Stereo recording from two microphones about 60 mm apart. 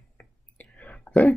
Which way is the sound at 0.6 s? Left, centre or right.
Left.